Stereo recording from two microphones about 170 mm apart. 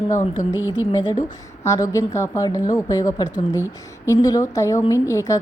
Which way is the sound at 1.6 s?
20° left (ahead or behind).